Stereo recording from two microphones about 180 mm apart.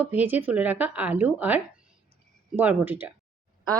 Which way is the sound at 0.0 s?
10° right (ahead or behind).